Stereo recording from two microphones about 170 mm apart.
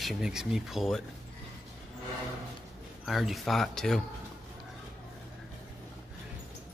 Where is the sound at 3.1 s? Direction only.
Centre (ahead or behind).